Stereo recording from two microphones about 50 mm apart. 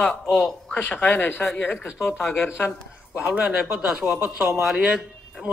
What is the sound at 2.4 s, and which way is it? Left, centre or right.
Speech, left.